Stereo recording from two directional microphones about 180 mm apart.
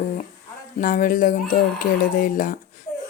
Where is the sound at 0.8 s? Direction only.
50° left (ahead or behind).